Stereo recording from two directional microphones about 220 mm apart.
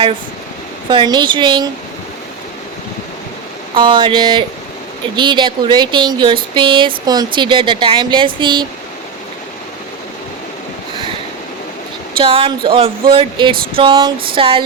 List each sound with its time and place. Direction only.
0.9 s speech: 20° right (ahead or behind)
3.8 s speech: 25° right (ahead or behind)
12.1 s speech: 25° right (ahead or behind)